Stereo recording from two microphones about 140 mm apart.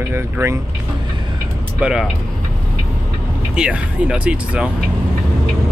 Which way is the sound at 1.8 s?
5° right (ahead or behind).